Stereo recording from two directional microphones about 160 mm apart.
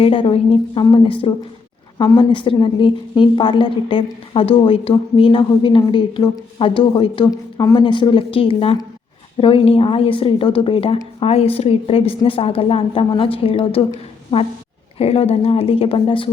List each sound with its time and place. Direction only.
0.0 s a woman's voice: 35° left (ahead or behind)
7.3 s a woman's voice: 20° left (ahead or behind)
14.9 s a woman's voice: 40° left (ahead or behind)